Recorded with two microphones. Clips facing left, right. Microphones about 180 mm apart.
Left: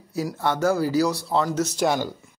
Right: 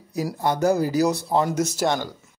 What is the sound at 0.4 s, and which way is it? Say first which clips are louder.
Speech: right 1 dB; 15° right (ahead or behind).